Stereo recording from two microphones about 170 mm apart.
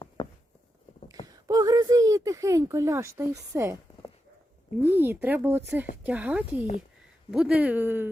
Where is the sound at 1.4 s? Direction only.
20° right (ahead or behind).